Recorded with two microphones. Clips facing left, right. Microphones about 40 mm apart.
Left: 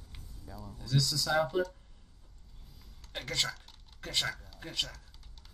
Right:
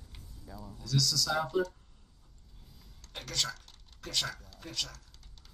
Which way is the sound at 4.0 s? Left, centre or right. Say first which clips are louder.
Left 1 dB; left.